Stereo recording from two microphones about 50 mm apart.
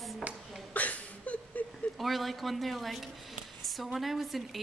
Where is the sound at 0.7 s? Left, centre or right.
Left.